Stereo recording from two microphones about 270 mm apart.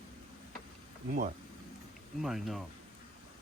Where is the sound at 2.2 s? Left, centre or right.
Centre.